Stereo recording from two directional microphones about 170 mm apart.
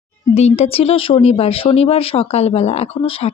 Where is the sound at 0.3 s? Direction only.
40° left (ahead or behind).